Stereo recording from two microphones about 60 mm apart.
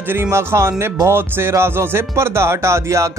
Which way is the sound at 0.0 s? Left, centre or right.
Right.